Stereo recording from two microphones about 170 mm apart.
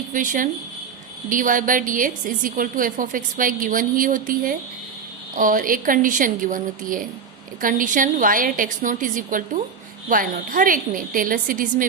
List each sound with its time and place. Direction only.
0.1 s a woman's voice: 50° right (ahead or behind)